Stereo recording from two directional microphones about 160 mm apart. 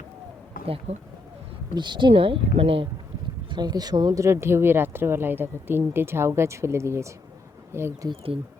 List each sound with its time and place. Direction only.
0.6 s speech: 35° right (ahead or behind); by 8.1 s 15° right (ahead or behind)